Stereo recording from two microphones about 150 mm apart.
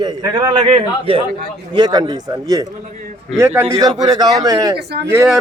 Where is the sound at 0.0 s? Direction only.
25° right (ahead or behind).